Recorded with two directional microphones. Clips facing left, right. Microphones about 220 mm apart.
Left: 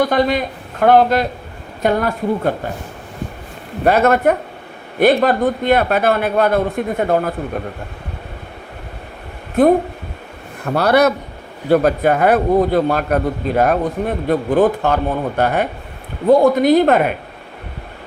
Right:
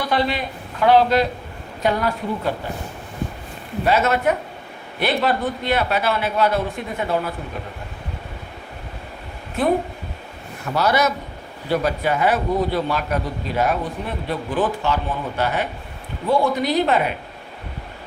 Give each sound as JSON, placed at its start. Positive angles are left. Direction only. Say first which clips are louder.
{"t": 0.0, "sound": "a man's voice", "louder": "left 6 dB", "side_deg": 45}
{"t": 3.8, "sound": "a man's voice", "louder": "left 6 dB", "side_deg": 55}
{"t": 10.6, "sound": "a man's voice", "louder": "left 6 dB", "side_deg": 55}